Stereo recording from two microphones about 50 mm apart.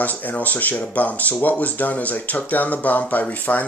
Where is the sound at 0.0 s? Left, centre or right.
Left.